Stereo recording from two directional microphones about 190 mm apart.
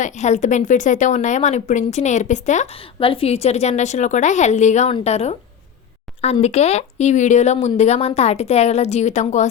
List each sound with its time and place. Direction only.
0.0 s speech: 40° left (ahead or behind)